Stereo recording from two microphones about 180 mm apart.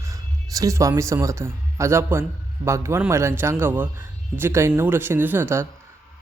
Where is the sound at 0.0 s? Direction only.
20° right (ahead or behind).